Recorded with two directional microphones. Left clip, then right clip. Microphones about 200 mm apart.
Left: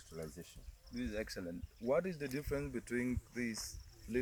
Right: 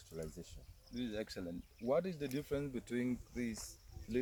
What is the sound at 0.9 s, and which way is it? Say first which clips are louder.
Speech: left 1 dB; centre (ahead or behind).